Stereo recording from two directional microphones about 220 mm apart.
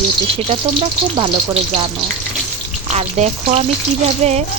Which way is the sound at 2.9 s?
30° right (ahead or behind).